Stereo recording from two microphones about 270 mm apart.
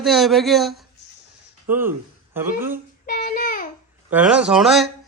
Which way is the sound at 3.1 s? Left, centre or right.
Left.